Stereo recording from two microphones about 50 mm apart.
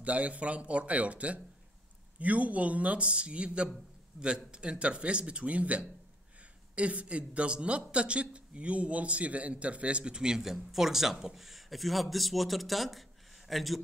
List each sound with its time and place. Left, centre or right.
0.0 s a man's voice: right; by 13.7 s centre